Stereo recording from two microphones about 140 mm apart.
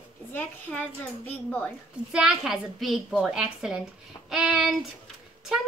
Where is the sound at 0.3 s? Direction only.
15° left (ahead or behind).